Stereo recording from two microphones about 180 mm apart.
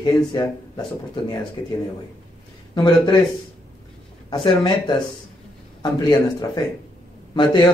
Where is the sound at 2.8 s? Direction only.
25° left (ahead or behind).